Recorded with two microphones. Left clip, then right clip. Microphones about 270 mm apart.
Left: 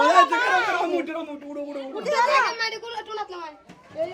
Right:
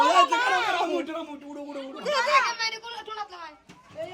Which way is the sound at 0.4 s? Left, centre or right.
Centre.